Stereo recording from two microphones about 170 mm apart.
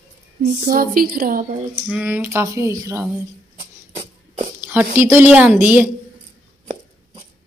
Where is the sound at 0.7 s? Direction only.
55° right (ahead or behind).